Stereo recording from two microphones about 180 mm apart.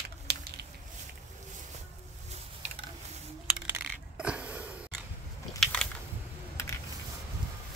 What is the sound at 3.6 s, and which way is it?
Coin, 10° right (ahead or behind).